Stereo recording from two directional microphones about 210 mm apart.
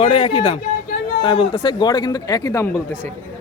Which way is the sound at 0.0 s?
25° left (ahead or behind).